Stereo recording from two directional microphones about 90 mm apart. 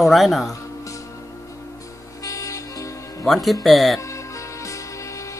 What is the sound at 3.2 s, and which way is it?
Speech, centre (ahead or behind).